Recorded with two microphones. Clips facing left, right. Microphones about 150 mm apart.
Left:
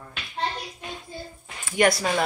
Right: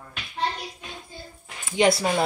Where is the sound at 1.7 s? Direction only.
25° right (ahead or behind).